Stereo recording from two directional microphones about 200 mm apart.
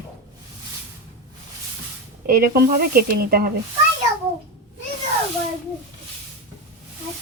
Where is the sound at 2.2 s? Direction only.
50° right (ahead or behind).